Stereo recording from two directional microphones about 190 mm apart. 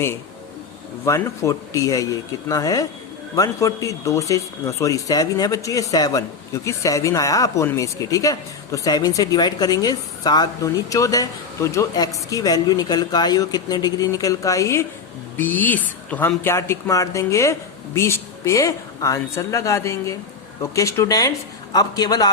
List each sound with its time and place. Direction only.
1.0 s speech: 15° left (ahead or behind)